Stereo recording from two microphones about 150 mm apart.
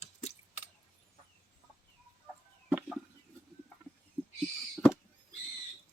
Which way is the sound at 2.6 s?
10° right (ahead or behind).